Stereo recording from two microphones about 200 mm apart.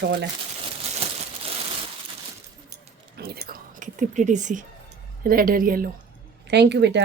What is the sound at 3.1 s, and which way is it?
Whispering, 50° right (ahead or behind).